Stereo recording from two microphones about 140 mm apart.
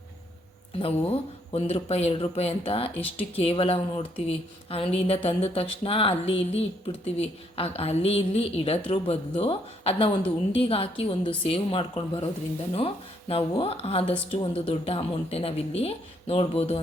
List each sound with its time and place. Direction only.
0.8 s a woman's voice: 45° left (ahead or behind)